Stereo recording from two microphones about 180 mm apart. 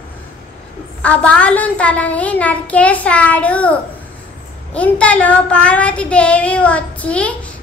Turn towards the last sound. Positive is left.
turn(degrees=5)  # may be behind; listen again after turning